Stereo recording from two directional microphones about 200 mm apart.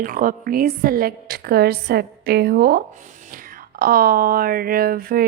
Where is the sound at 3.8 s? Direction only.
45° right (ahead or behind).